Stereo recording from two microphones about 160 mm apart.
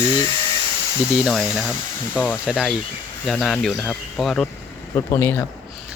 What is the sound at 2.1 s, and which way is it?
Speech, 10° left (ahead or behind).